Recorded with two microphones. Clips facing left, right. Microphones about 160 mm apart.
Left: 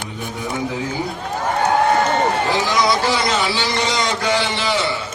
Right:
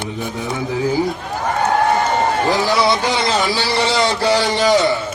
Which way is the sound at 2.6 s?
30° right (ahead or behind).